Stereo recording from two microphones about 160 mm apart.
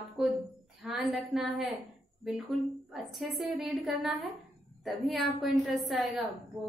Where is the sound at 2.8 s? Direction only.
Centre (ahead or behind).